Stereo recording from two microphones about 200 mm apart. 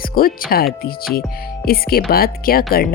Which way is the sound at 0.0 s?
45° left (ahead or behind).